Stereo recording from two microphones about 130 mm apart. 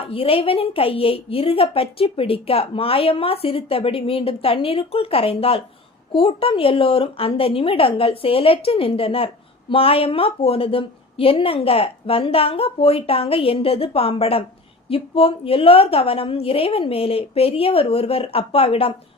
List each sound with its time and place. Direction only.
0.0 s a woman's voice: 45° left (ahead or behind)